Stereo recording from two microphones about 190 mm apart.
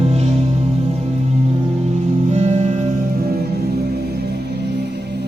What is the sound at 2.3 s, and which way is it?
Music, 35° right (ahead or behind).